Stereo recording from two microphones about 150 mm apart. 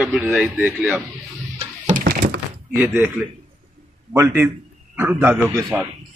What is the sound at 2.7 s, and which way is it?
Speech, 15° right (ahead or behind).